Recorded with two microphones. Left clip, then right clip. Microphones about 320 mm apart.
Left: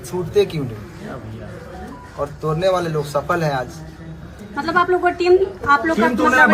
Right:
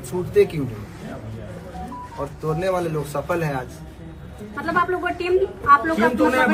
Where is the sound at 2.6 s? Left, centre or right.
Centre.